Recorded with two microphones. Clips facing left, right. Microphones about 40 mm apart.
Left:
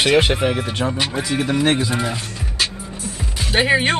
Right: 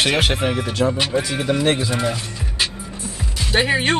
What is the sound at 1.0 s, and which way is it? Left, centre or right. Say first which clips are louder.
Speech: right 2 dB; centre.